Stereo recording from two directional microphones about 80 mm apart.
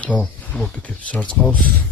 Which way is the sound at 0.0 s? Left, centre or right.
Centre.